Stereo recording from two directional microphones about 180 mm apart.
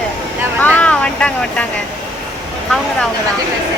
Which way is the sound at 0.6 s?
10° left (ahead or behind).